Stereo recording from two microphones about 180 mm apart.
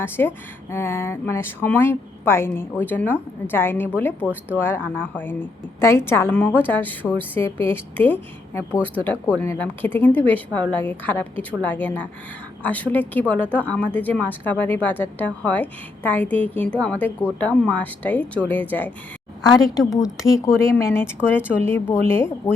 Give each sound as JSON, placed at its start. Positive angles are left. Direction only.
{"t": 0.0, "sound": "speech", "side_deg": 10}
{"t": 4.3, "sound": "speech", "side_deg": -10}
{"t": 4.6, "sound": "speech", "side_deg": 10}
{"t": 19.4, "sound": "speech", "side_deg": 20}